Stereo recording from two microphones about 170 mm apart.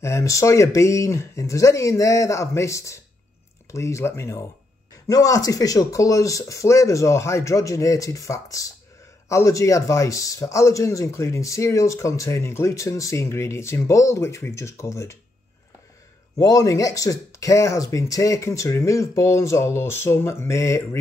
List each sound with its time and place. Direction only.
0.0 s speech: 15° left (ahead or behind)
16.3 s speech: 20° left (ahead or behind)